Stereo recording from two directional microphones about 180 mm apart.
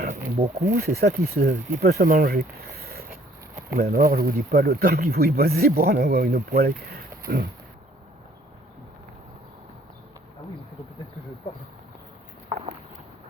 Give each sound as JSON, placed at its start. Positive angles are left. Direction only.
{"t": 0.3, "sound": "speech", "side_deg": -30}
{"t": 0.7, "sound": "speech", "side_deg": -55}